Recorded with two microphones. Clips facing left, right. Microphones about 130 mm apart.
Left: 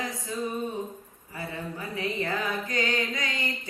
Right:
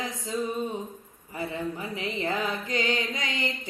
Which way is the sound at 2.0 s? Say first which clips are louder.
Left 1 dB; 20° right (ahead or behind).